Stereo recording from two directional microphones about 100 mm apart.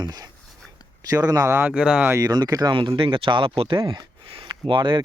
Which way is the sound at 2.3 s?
40° right (ahead or behind).